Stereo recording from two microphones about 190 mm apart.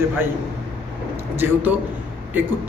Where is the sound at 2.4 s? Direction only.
10° right (ahead or behind).